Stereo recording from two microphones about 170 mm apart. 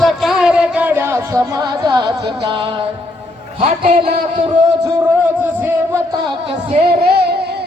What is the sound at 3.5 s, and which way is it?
Speech, 35° right (ahead or behind).